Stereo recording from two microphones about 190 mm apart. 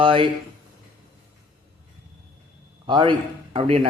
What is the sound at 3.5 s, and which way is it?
Speech, 30° right (ahead or behind).